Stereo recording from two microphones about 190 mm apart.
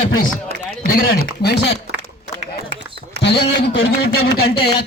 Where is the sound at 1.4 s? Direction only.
60° left (ahead or behind).